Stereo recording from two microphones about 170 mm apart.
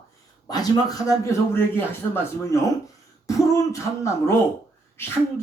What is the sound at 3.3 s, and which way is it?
Speech, 20° left (ahead or behind).